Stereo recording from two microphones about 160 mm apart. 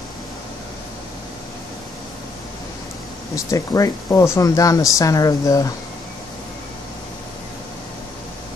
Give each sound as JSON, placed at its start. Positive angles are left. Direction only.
{"t": 3.3, "sound": "speech", "side_deg": 20}